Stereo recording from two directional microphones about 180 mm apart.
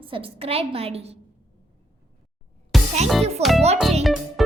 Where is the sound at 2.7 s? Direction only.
Centre (ahead or behind).